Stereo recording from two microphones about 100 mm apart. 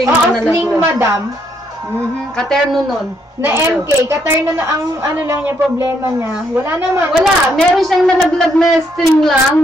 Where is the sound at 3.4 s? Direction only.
25° right (ahead or behind).